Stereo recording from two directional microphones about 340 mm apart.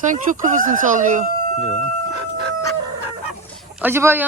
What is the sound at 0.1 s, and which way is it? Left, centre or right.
Speech, right.